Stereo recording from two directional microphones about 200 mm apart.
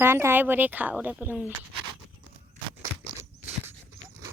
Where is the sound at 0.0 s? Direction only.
10° right (ahead or behind).